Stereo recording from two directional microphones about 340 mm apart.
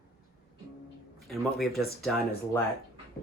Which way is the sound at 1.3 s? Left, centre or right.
Centre.